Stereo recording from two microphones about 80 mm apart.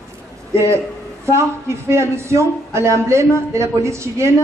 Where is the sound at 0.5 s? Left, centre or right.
Right.